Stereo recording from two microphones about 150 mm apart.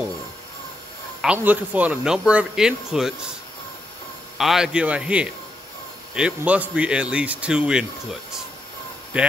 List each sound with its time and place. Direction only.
1.2 s speech: 10° right (ahead or behind)
4.4 s speech: centre (ahead or behind)